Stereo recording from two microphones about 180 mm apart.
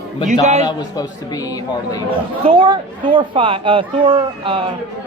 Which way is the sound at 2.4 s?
30° right (ahead or behind).